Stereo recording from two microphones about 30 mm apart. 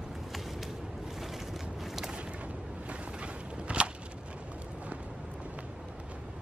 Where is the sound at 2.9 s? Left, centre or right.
Right.